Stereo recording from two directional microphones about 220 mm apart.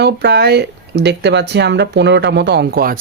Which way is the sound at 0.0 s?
50° right (ahead or behind).